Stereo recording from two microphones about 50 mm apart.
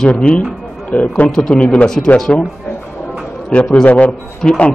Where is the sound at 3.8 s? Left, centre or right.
Left.